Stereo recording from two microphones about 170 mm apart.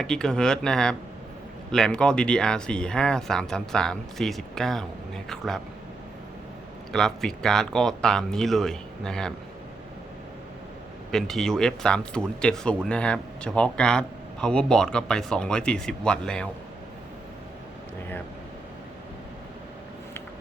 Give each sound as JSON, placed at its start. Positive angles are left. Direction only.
{"t": 0.0, "sound": "speech", "side_deg": 5}
{"t": 6.9, "sound": "speech", "side_deg": 5}
{"t": 11.1, "sound": "speech", "side_deg": 5}